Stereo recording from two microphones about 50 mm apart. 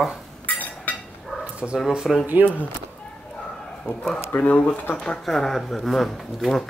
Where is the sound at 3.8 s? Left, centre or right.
Centre.